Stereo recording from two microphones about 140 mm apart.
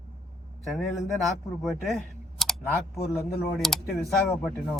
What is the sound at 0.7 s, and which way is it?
Speech, centre (ahead or behind).